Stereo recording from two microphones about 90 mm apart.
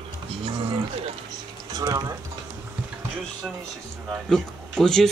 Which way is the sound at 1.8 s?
40° right (ahead or behind).